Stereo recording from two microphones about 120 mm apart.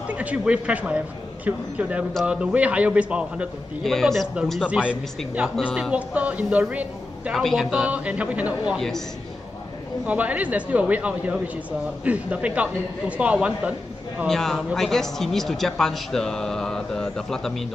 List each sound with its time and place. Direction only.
0.1 s a man's voice: 10° right (ahead or behind)
3.8 s speech: centre (ahead or behind)
4.6 s a man's voice: 10° right (ahead or behind)
8.7 s speech: 5° left (ahead or behind)
10.0 s a man's voice: 10° right (ahead or behind)
14.2 s speech: 5° left (ahead or behind)